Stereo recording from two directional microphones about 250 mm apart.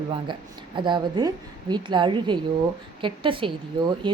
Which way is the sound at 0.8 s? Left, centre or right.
Centre.